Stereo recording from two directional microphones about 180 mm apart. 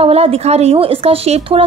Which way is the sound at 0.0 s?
35° right (ahead or behind).